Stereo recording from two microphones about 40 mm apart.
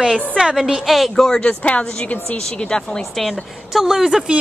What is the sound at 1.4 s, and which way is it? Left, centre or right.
Speech, left.